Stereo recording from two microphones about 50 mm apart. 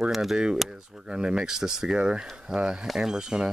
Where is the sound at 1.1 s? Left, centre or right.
Centre.